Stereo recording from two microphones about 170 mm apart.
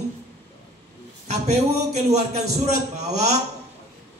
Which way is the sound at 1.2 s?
40° right (ahead or behind).